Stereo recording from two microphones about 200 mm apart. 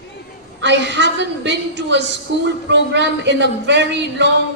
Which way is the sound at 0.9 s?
60° right (ahead or behind).